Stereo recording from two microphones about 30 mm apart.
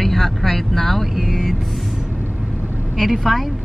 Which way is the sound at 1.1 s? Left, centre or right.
Centre.